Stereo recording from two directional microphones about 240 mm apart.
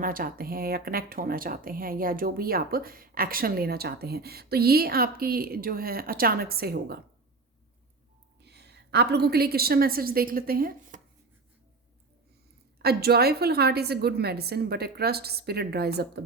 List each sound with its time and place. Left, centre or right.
0.0 s speech: right
8.4 s a woman's voice: right
12.8 s speech: right